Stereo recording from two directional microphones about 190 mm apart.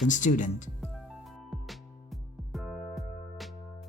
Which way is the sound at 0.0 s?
40° left (ahead or behind).